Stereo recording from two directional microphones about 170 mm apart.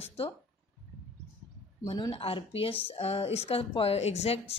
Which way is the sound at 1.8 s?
30° left (ahead or behind).